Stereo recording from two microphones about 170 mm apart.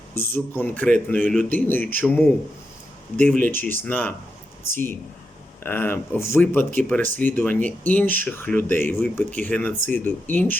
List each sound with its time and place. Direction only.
0.2 s speech: 10° left (ahead or behind)
5.6 s speech: 10° left (ahead or behind)